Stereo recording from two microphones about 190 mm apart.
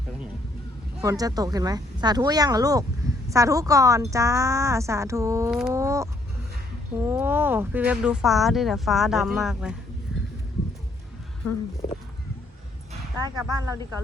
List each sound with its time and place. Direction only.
1.0 s speech: 20° right (ahead or behind)
5.5 s speech: centre (ahead or behind)
5.7 s speech: 15° right (ahead or behind)
13.2 s speech: 20° right (ahead or behind)